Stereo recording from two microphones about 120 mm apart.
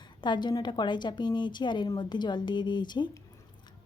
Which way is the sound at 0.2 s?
40° left (ahead or behind).